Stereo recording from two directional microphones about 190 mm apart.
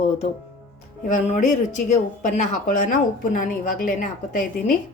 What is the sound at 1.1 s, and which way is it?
A woman's voice, 40° left (ahead or behind).